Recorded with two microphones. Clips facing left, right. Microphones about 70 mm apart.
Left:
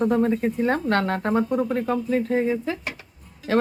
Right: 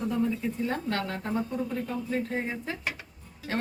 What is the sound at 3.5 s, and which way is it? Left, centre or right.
Speech, left.